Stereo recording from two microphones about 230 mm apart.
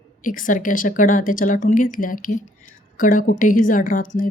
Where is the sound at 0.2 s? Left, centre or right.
Left.